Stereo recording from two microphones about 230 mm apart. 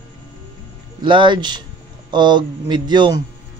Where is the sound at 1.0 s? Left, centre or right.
Right.